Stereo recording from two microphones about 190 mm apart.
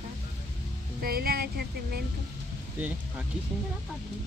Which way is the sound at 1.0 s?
55° right (ahead or behind).